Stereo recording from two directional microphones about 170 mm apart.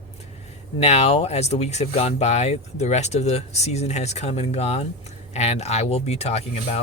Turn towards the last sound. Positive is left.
turn(degrees=40)  # may be behind; listen again after turning